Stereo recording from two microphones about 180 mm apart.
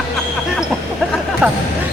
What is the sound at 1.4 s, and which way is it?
Speech, 5° right (ahead or behind).